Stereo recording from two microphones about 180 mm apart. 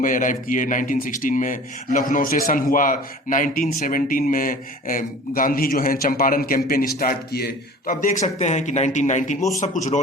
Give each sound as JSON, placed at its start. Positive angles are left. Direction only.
{"t": 0.0, "sound": "a man's voice", "side_deg": 45}